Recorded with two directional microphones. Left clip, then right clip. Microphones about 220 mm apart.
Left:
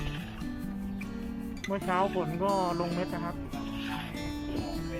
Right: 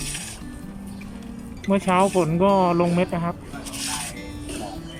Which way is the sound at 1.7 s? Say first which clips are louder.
Right 10 dB; 15° right (ahead or behind).